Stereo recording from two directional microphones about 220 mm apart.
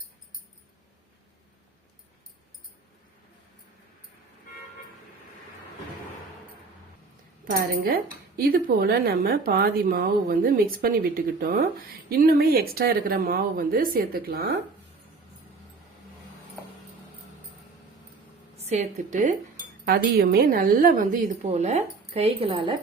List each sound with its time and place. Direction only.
7.5 s a woman's voice: 40° right (ahead or behind)
18.5 s a woman's voice: 30° right (ahead or behind)